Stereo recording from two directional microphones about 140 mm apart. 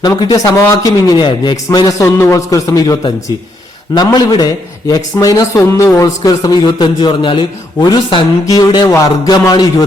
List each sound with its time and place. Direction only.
0.0 s a man's voice: 35° left (ahead or behind)